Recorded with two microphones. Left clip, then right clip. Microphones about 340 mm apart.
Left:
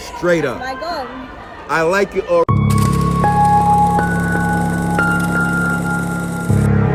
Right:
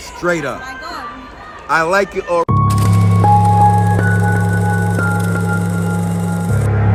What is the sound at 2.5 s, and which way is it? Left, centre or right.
Music, centre.